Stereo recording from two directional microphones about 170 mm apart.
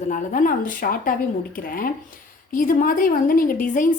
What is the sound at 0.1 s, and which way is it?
A woman's voice, 55° left (ahead or behind).